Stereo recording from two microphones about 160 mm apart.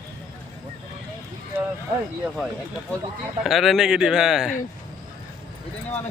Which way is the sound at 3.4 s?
Centre (ahead or behind).